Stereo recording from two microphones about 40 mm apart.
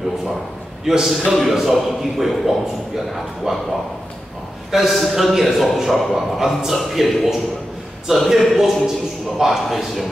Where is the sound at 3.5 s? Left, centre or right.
Centre.